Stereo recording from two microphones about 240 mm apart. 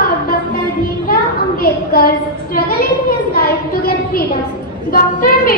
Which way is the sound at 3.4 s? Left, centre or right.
Left.